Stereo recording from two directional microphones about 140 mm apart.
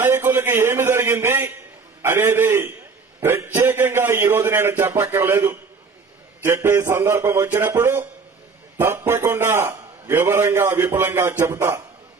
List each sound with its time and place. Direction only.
0.0 s a man's voice: 15° right (ahead or behind)